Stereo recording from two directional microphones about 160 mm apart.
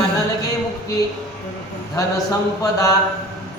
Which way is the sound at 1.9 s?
20° left (ahead or behind).